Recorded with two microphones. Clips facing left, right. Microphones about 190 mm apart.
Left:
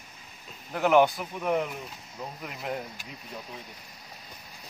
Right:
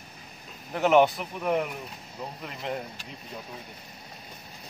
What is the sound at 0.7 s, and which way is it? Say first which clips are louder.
Speech: right 1 dB; centre (ahead or behind).